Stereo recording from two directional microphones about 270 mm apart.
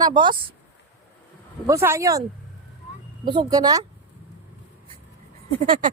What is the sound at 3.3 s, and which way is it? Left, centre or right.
Speech, centre.